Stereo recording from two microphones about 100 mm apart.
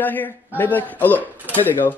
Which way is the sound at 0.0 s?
20° left (ahead or behind).